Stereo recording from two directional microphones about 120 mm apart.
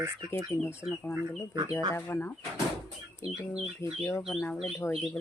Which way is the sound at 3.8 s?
25° left (ahead or behind).